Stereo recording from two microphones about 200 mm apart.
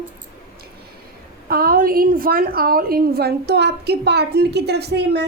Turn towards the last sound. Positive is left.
turn(degrees=-55)  # may be behind; listen again after turning